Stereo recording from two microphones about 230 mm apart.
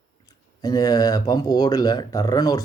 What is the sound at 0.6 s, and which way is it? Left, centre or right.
Speech, centre.